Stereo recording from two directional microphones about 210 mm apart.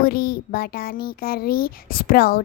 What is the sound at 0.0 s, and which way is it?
Speech, 45° left (ahead or behind).